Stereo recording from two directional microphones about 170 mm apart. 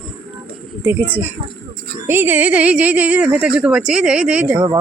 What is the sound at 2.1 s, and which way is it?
A woman's voice, 10° right (ahead or behind).